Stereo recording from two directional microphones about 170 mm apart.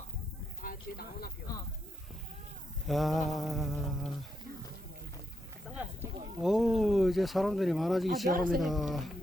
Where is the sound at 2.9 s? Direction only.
Centre (ahead or behind).